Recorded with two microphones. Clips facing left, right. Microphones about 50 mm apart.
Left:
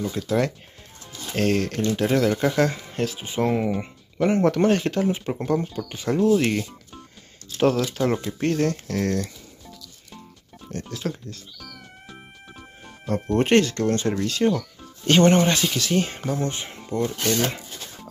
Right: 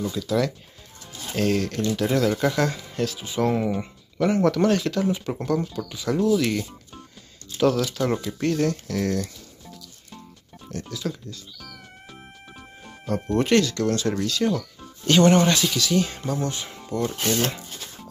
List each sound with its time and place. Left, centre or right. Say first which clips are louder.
0.1 s speech: left 1 dB; left
3.5 s speech: left 1 dB; centre
4.2 s speech: left 1 dB; left
5.2 s speech: left 1 dB; centre
5.9 s speech: left 2 dB; left
10.7 s speech: left 1 dB; left
13.0 s speech: left 1 dB; left